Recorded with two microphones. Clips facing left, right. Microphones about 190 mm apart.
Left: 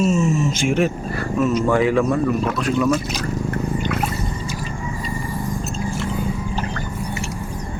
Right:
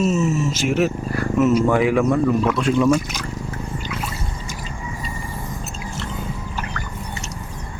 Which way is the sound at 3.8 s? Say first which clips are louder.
Left 6 dB; 55° left (ahead or behind).